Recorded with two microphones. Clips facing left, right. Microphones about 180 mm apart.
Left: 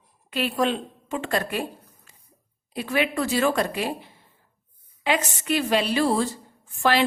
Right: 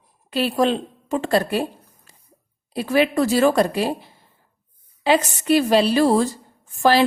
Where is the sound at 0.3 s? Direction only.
35° right (ahead or behind).